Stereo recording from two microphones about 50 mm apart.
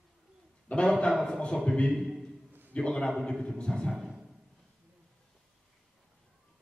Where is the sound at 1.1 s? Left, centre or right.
Centre.